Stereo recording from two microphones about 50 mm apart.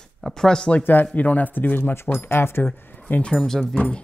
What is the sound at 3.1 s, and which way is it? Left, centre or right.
Speech, left.